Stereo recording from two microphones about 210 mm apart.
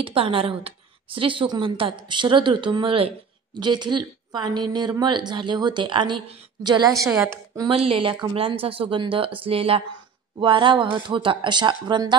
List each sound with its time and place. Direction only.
0.0 s a woman's voice: 25° right (ahead or behind)
6.9 s a woman's voice: centre (ahead or behind)
7.8 s a woman's voice: 25° right (ahead or behind)